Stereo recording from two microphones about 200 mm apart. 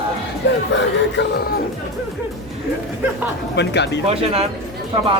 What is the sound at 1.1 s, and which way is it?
Music, 55° left (ahead or behind).